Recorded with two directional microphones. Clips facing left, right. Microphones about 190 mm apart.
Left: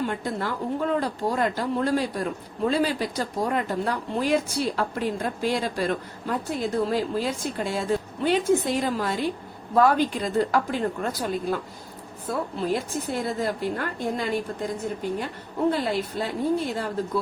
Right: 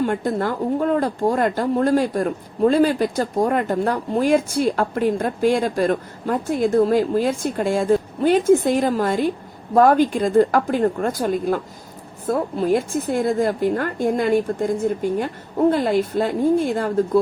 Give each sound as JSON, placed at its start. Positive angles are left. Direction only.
{"t": 0.0, "sound": "speech", "side_deg": -50}